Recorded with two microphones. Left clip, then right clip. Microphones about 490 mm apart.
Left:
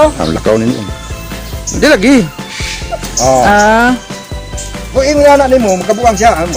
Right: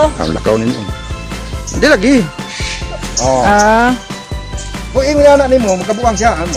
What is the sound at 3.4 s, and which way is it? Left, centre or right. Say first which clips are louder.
Speech: left 1 dB; right.